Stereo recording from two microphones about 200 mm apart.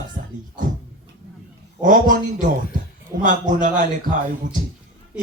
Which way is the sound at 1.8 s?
40° right (ahead or behind).